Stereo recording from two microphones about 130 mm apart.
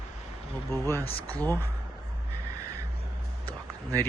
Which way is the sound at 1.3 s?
15° left (ahead or behind).